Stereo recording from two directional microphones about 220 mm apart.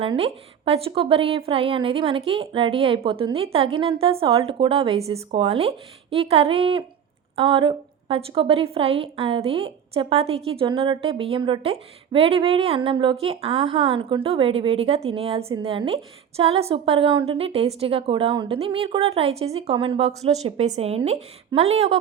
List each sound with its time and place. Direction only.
0.0 s a woman's voice: 25° right (ahead or behind)